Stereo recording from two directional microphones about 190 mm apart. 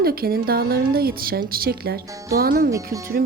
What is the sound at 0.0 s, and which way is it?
A woman's voice, 55° right (ahead or behind).